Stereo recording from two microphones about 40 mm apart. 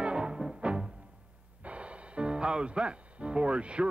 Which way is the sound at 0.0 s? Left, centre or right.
Right.